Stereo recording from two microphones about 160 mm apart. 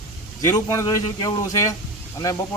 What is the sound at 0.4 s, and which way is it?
Speech, 20° left (ahead or behind).